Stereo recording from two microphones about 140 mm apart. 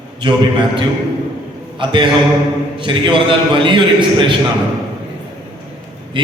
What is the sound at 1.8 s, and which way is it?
A man's voice, 35° right (ahead or behind).